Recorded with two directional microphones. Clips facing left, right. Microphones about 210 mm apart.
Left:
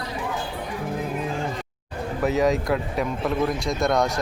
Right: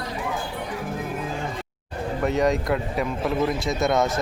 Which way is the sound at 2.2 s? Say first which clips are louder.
Left 1 dB; centre (ahead or behind).